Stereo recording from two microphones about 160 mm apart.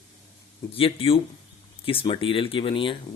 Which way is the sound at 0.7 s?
35° left (ahead or behind).